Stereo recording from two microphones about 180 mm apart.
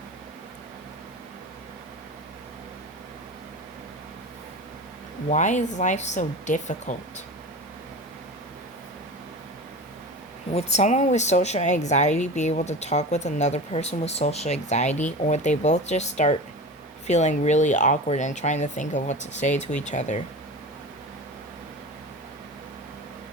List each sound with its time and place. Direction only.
5.3 s speech: 40° left (ahead or behind)
10.5 s speech: 40° left (ahead or behind)